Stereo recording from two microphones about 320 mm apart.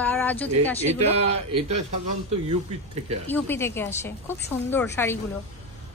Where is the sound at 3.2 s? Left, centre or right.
Centre.